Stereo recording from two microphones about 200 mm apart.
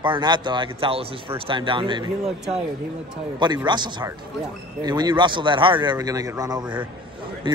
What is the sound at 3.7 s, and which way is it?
A man's voice, 20° right (ahead or behind).